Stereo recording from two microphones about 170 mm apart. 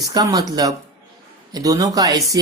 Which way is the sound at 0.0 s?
20° right (ahead or behind).